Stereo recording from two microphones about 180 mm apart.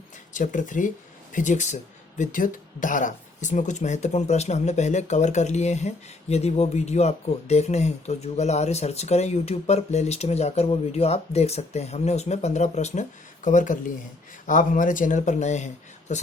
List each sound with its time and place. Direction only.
0.3 s speech: 45° left (ahead or behind)